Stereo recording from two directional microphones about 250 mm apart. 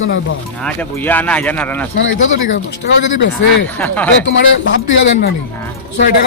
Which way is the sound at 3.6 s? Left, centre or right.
Centre.